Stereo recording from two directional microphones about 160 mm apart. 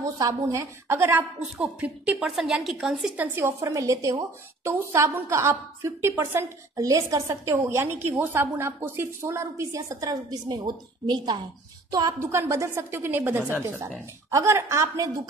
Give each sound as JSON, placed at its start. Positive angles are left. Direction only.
{"t": 0.0, "sound": "a woman's voice", "side_deg": -20}
{"t": 3.3, "sound": "a woman's voice", "side_deg": -15}